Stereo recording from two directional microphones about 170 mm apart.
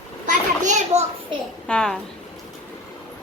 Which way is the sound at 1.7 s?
5° left (ahead or behind).